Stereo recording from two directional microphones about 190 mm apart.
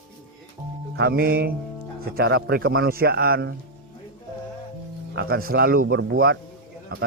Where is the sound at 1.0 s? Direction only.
55° right (ahead or behind).